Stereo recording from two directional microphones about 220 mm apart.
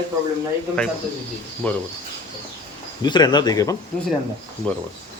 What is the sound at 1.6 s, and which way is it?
Speech, 5° left (ahead or behind).